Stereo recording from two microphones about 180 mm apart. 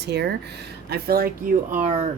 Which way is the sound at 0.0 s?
65° right (ahead or behind).